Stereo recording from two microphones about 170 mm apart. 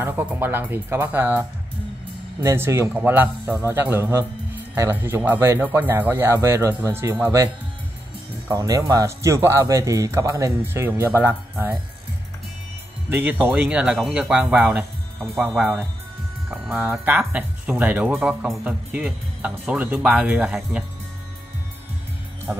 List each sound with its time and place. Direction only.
0.0 s speech: 10° right (ahead or behind)
2.4 s speech: 15° right (ahead or behind)
13.1 s speech: 10° right (ahead or behind)
22.5 s music: 10° right (ahead or behind)